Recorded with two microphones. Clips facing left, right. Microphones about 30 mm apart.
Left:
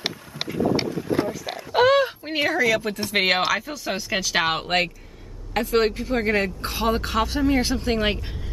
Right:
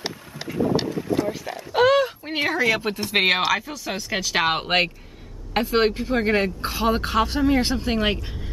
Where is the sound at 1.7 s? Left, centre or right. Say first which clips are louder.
Even; centre.